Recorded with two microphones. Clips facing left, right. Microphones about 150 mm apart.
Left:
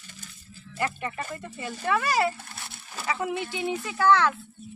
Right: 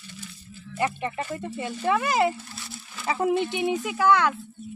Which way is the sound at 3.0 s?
30° right (ahead or behind).